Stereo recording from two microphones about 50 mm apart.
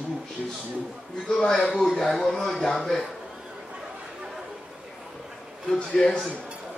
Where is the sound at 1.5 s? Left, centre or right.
Centre.